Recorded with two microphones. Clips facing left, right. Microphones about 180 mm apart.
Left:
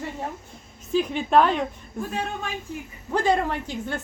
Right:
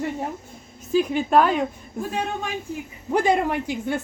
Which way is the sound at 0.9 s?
5° right (ahead or behind).